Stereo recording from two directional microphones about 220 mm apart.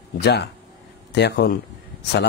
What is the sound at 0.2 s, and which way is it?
Speech, 50° left (ahead or behind).